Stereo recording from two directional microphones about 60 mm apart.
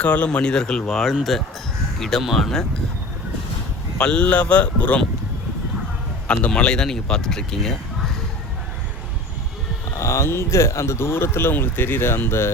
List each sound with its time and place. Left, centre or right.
0.0 s speech: left
0.3 s speech: centre
4.0 s speech: centre
6.2 s speech: centre
9.9 s speech: left